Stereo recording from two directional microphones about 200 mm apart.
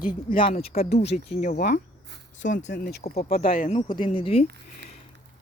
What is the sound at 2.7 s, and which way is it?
Speech, 55° left (ahead or behind).